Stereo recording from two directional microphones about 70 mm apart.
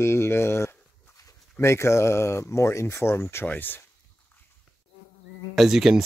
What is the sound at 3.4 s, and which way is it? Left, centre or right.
Speech, left.